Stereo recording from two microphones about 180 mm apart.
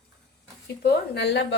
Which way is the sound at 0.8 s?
70° left (ahead or behind).